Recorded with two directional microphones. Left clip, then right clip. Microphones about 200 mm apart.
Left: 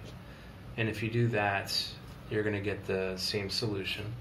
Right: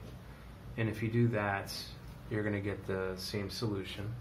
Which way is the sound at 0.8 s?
35° right (ahead or behind).